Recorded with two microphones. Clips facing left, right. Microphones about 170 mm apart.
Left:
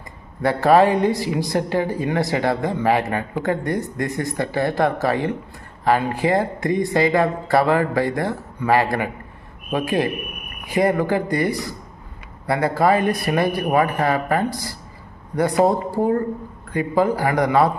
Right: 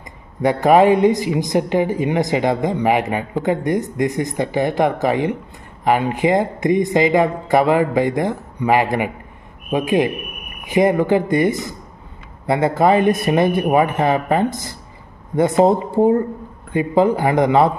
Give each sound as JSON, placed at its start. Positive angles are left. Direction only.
{"t": 0.4, "sound": "a man's voice", "side_deg": -20}